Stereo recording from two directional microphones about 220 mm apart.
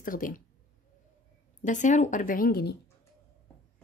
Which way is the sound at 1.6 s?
35° left (ahead or behind).